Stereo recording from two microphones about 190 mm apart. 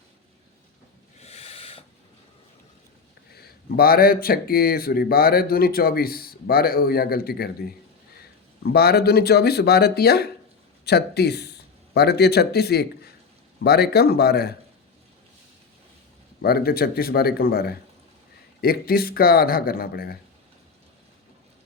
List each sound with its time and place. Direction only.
1.2 s owl: 30° left (ahead or behind)
3.3 s speech: 55° left (ahead or behind)
16.4 s speech: 55° left (ahead or behind)